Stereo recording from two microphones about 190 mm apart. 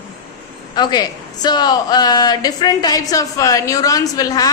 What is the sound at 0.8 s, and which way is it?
A woman's voice, 25° left (ahead or behind).